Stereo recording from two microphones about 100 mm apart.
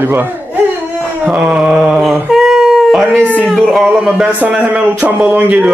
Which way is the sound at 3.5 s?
5° right (ahead or behind).